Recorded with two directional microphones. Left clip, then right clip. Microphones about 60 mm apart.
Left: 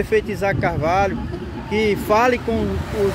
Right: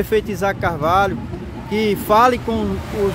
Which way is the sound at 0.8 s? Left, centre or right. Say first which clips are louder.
Right 2 dB; right.